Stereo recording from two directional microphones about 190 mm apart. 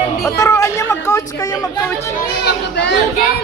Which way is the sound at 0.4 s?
15° left (ahead or behind).